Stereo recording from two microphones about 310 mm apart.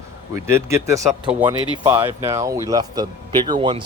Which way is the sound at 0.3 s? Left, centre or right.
Centre.